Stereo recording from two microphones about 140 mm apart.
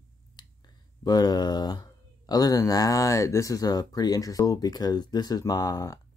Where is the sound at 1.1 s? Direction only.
30° left (ahead or behind).